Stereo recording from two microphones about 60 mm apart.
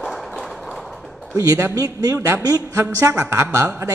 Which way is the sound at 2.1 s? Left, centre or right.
Right.